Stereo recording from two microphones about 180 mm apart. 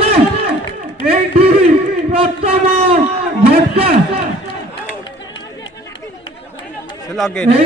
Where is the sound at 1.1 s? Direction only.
35° right (ahead or behind).